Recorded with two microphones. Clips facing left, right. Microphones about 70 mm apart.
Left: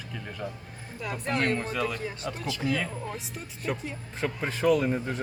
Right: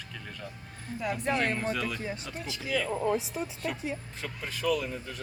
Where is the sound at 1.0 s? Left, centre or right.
Centre.